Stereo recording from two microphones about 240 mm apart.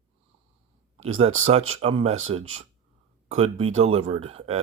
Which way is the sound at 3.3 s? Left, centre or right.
Right.